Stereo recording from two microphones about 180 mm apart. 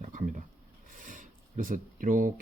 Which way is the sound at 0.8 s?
45° right (ahead or behind).